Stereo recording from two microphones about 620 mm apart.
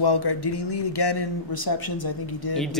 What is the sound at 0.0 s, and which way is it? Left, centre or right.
A man's voice, left.